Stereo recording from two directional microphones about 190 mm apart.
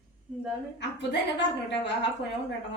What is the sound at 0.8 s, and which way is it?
A woman's voice, 65° left (ahead or behind).